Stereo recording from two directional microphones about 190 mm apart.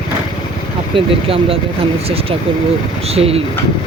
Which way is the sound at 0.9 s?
30° right (ahead or behind).